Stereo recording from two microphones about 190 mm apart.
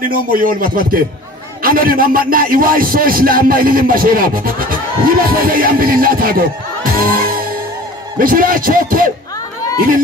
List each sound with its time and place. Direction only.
0.0 s a man's voice: 50° right (ahead or behind)